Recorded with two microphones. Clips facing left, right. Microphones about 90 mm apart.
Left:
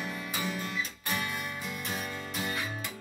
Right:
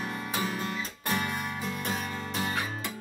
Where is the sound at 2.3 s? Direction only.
65° right (ahead or behind).